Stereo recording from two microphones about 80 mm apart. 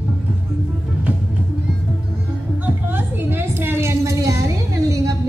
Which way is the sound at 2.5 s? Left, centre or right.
Right.